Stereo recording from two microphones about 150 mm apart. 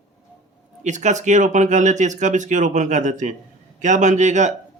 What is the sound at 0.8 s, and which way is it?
Speech, 55° right (ahead or behind).